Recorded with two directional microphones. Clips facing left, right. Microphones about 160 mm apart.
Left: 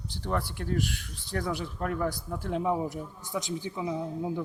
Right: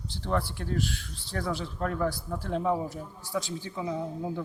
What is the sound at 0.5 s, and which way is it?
Speech, 50° left (ahead or behind).